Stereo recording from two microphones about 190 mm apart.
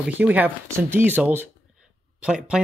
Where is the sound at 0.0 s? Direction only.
10° right (ahead or behind).